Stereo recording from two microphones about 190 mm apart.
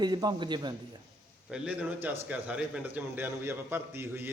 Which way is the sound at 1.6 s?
10° right (ahead or behind).